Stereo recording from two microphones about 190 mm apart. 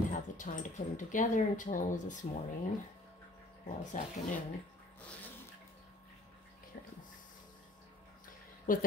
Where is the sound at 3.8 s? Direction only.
40° left (ahead or behind).